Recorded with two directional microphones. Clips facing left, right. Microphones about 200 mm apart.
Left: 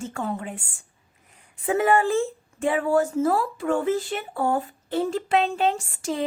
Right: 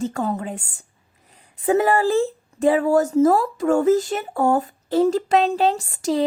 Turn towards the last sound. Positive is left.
turn(degrees=-35)  # may be behind; listen again after turning